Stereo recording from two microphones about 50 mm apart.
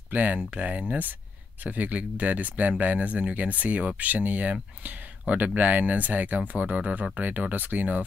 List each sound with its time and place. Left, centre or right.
0.1 s speech: right